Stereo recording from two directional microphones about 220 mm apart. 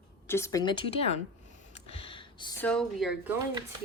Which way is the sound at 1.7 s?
25° left (ahead or behind).